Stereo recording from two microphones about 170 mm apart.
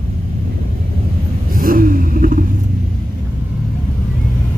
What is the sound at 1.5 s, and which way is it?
Vehicle, 55° right (ahead or behind).